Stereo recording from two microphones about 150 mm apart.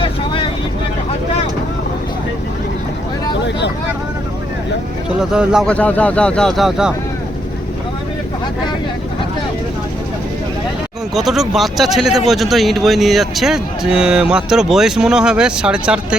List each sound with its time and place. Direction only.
5.2 s speech: 5° right (ahead or behind)
5.6 s speech: 10° left (ahead or behind)
11.1 s speech: centre (ahead or behind)